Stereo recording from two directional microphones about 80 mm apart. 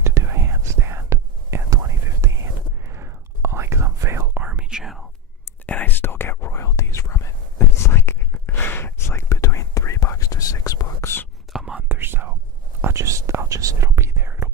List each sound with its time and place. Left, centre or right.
0.0 s whispering: right
4.4 s whispering: centre
4.8 s whispering: centre
5.6 s whispering: left
11.5 s whispering: centre
11.9 s whispering: right
12.8 s whispering: right